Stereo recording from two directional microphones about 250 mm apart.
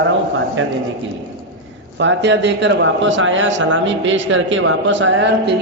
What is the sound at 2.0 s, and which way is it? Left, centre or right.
A man's voice, right.